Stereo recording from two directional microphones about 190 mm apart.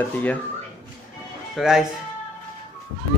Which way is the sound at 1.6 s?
Centre (ahead or behind).